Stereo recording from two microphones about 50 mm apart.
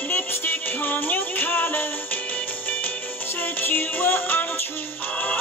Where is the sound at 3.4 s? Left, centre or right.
Left.